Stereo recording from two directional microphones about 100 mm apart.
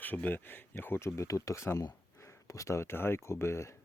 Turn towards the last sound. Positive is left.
turn(degrees=30)  # may be behind; listen again after turning